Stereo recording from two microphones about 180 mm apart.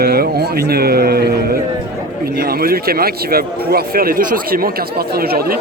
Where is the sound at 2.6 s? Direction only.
55° right (ahead or behind).